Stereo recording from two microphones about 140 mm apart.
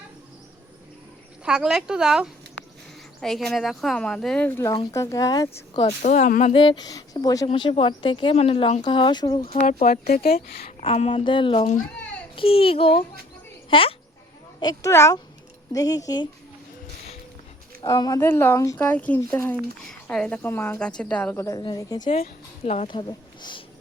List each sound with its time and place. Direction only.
1.5 s speech: 5° right (ahead or behind)
4.4 s a woman's voice: 15° left (ahead or behind)
6.0 s speech: 60° left (ahead or behind)
6.5 s speech: 35° left (ahead or behind)
9.6 s speech: 80° left
10.7 s a woman's voice: 50° left (ahead or behind)
14.6 s speech: 25° left (ahead or behind)
17.8 s speech: 30° left (ahead or behind)
18.2 s a woman's voice: 15° left (ahead or behind)
18.8 s a woman's voice: 10° left (ahead or behind)
21.3 s speech: 25° left (ahead or behind)
22.0 s a woman's voice: 50° left (ahead or behind)
22.9 s speech: 35° left (ahead or behind)